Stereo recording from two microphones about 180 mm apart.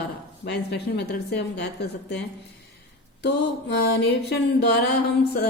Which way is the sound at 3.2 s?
70° left (ahead or behind).